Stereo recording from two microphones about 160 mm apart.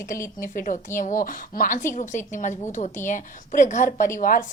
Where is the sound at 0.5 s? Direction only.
60° left (ahead or behind).